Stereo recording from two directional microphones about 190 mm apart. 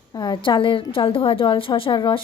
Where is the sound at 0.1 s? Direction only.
25° left (ahead or behind).